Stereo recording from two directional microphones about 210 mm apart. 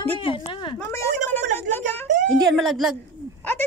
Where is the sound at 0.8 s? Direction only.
10° left (ahead or behind).